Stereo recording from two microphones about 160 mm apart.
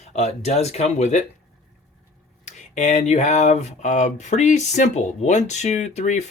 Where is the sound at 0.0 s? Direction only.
45° left (ahead or behind).